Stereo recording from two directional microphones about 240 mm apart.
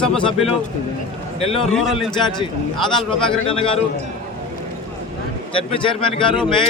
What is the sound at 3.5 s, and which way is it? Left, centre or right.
Speech, left.